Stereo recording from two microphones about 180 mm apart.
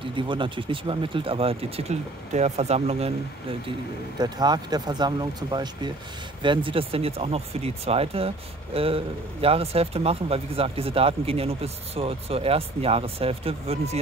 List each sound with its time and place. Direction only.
0.0 s a man's voice: 25° right (ahead or behind)